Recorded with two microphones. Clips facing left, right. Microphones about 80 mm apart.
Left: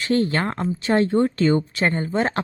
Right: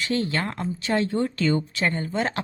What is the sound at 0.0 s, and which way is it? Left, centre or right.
A woman's voice, left.